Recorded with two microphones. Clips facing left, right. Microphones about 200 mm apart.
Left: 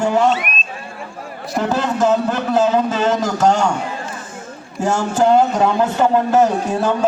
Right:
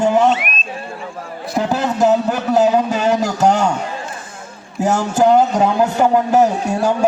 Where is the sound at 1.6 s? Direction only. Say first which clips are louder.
Right 1 dB; 15° right (ahead or behind).